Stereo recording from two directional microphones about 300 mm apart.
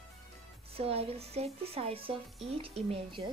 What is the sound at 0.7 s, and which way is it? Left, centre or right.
Speech, centre.